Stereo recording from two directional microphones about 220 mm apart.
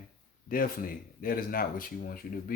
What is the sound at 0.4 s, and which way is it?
Speech, 40° left (ahead or behind).